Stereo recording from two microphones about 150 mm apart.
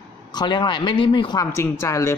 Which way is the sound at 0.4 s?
30° left (ahead or behind).